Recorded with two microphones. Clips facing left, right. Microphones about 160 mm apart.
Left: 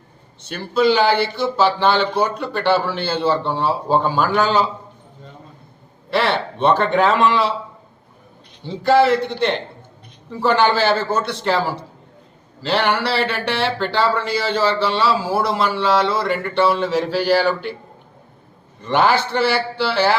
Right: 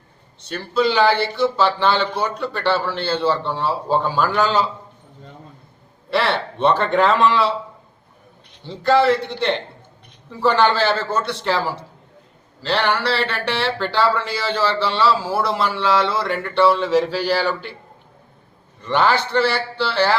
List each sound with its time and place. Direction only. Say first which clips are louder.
0.4 s speech: left 3 dB; 5° left (ahead or behind)
6.1 s speech: left 1 dB; centre (ahead or behind)
8.6 s speech: left 1 dB; 5° left (ahead or behind)
12.6 s speech: left 1 dB; 5° left (ahead or behind)
18.9 s a man's voice: left 2 dB; 5° left (ahead or behind)